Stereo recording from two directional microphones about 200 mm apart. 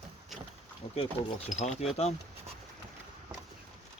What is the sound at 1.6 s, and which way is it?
Speech, 30° left (ahead or behind).